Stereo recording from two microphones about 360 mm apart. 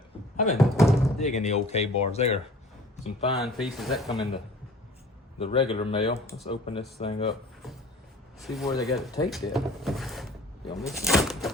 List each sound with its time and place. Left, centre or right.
0.5 s speech: centre
1.2 s speech: centre
3.3 s speech: centre
5.4 s speech: centre
8.4 s speech: centre